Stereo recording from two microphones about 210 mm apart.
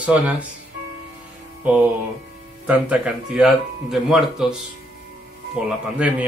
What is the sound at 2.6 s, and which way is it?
Speech, 5° right (ahead or behind).